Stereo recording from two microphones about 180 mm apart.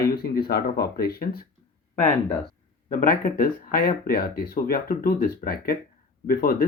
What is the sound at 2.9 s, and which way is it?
Speech, 50° left (ahead or behind).